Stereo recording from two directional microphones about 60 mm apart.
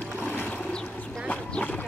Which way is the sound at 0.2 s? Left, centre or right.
Left.